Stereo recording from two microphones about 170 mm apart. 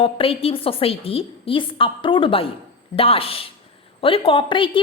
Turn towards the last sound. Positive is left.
turn(degrees=30)  # may be behind; listen again after turning